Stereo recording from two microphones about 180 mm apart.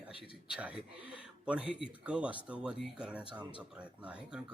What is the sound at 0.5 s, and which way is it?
Speech, 5° right (ahead or behind).